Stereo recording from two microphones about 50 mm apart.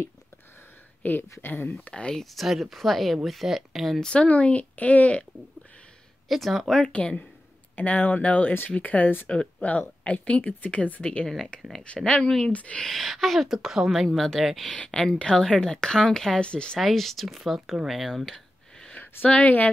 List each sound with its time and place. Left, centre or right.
1.0 s speech: left
1.9 s speech: left
2.4 s a woman's voice: centre
4.0 s speech: left
6.2 s speech: centre
6.8 s speech: left
11.2 s speech: centre
12.4 s speech: left
12.9 s a woman's voice: centre
14.0 s a woman's voice: centre
14.7 s speech: centre
16.8 s speech: centre
19.2 s speech: left